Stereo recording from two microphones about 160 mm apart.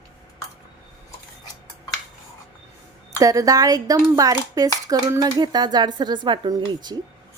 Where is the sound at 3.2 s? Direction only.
20° right (ahead or behind).